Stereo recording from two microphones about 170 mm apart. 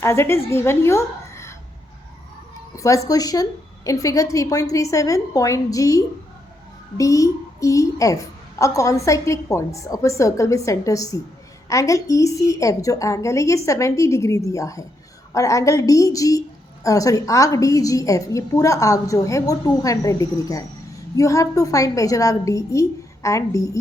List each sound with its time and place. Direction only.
0.0 s a woman's voice: 15° left (ahead or behind)
2.7 s a woman's voice: 20° left (ahead or behind)